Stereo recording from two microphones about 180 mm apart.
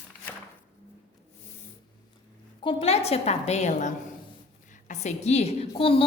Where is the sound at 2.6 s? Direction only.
30° left (ahead or behind).